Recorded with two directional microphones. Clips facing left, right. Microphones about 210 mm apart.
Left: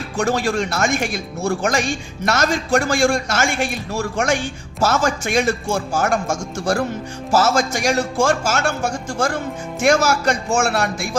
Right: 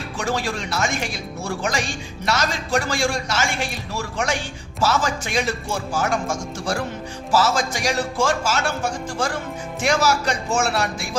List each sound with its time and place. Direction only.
0.2 s a man's voice: 45° left (ahead or behind)